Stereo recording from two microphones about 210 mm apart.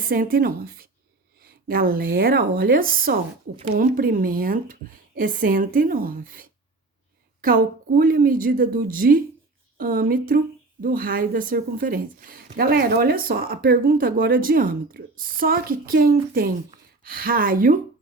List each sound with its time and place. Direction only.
0.0 s a woman's voice: 45° right (ahead or behind)